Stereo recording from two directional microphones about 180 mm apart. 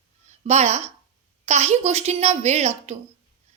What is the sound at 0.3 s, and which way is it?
A woman's voice, 40° right (ahead or behind).